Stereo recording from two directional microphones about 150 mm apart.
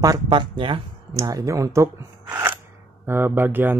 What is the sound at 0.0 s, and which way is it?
Speech, 25° right (ahead or behind).